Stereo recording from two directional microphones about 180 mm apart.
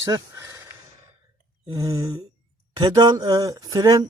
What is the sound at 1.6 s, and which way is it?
Speech, 20° right (ahead or behind).